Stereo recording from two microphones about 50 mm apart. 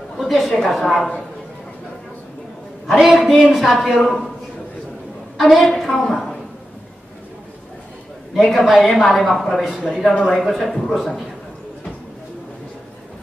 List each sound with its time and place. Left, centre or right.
0.2 s a woman's voice: centre
3.2 s a woman's voice: centre
5.4 s a woman's voice: centre
8.5 s a woman's voice: centre